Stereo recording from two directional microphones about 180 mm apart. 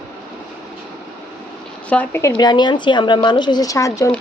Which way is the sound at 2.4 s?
25° left (ahead or behind).